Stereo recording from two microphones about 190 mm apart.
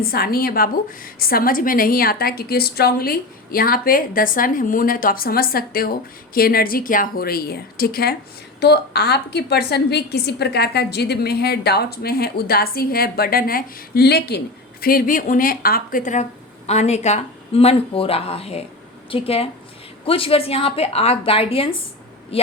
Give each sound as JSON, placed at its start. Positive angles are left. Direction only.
{"t": 0.0, "sound": "a woman's voice", "side_deg": 50}